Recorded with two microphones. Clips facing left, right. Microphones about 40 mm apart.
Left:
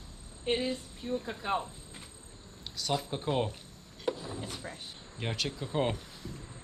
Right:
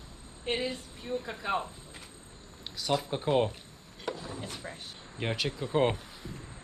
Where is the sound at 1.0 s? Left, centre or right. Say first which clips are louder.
Even; right.